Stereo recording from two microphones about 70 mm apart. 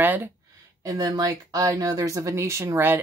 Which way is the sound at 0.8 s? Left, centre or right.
Right.